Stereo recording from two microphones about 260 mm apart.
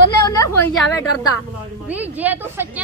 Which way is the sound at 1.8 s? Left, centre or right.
Centre.